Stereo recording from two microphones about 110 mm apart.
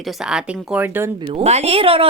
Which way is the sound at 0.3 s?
10° right (ahead or behind).